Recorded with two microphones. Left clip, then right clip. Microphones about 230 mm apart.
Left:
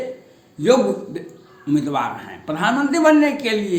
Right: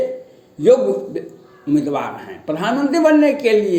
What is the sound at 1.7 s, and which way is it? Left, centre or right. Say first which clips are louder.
A man's voice: right 1 dB; centre.